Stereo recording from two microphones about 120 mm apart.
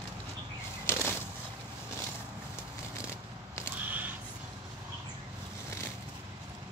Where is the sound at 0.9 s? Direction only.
20° left (ahead or behind).